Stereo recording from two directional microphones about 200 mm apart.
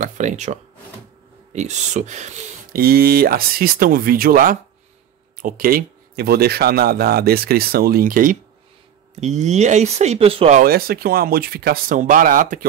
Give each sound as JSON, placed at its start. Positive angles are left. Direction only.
{"t": 0.0, "sound": "speech", "side_deg": -35}
{"t": 10.6, "sound": "speech", "side_deg": -50}